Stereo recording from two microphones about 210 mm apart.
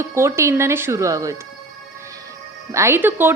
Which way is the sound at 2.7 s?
10° right (ahead or behind).